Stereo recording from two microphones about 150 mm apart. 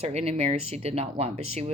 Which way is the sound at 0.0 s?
45° right (ahead or behind).